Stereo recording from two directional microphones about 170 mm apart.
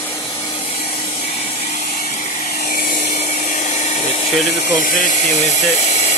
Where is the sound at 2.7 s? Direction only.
60° left (ahead or behind).